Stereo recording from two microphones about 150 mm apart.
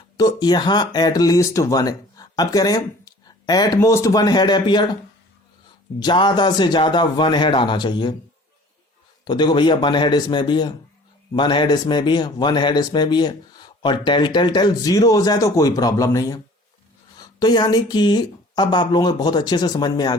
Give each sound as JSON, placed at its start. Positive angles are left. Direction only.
{"t": 0.2, "sound": "speech", "side_deg": 25}
{"t": 6.0, "sound": "a man's voice", "side_deg": 30}
{"t": 9.2, "sound": "speech", "side_deg": 30}